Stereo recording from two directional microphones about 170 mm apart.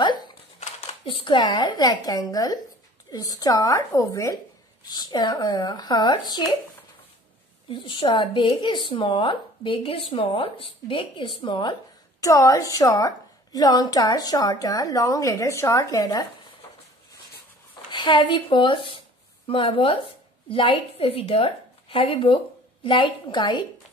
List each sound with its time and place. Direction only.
0.0 s typing: 25° left (ahead or behind)
1.0 s a woman's voice: 30° left (ahead or behind)
7.7 s a woman's voice: 30° left (ahead or behind)
17.9 s a woman's voice: 25° left (ahead or behind)